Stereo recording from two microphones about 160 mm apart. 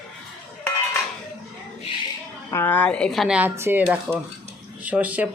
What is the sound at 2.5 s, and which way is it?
Speech, 10° left (ahead or behind).